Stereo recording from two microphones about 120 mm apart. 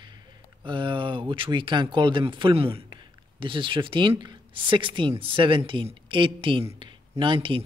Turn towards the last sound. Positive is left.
turn(degrees=-45)  # may be behind; listen again after turning